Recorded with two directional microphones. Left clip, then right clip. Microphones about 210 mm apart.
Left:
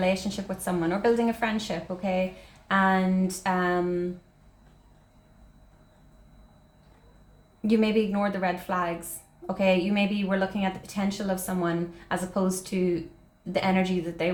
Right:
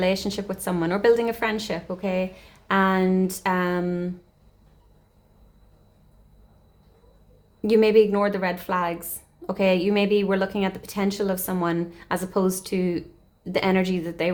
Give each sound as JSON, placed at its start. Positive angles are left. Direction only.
{"t": 0.0, "sound": "a woman's voice", "side_deg": -45}
{"t": 7.7, "sound": "a woman's voice", "side_deg": -45}